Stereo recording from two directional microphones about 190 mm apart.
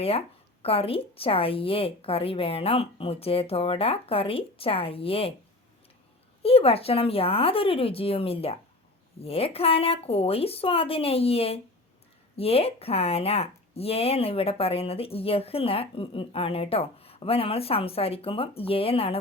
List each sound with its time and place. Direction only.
0.6 s a woman's voice: 30° left (ahead or behind)
6.4 s speech: 30° left (ahead or behind)